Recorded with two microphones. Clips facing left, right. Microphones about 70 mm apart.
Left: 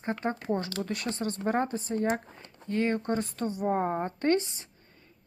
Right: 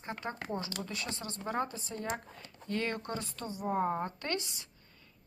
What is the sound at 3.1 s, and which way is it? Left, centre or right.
A woman's voice, left.